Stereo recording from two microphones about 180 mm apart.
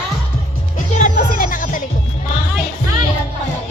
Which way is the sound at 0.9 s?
45° left (ahead or behind).